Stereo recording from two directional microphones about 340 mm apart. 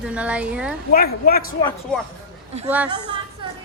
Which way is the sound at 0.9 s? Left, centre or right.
Left.